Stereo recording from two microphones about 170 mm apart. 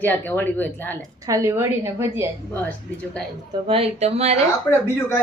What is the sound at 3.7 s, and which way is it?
Speech, 35° right (ahead or behind).